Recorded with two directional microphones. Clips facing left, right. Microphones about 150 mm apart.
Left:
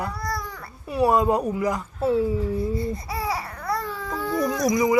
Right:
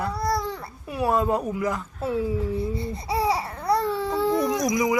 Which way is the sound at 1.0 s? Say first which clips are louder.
Left 3 dB; 10° left (ahead or behind).